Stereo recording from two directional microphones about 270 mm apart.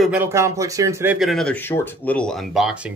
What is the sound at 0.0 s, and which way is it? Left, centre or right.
Speech, centre.